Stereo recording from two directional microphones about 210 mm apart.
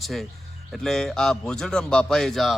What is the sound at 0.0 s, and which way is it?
Speech, centre (ahead or behind).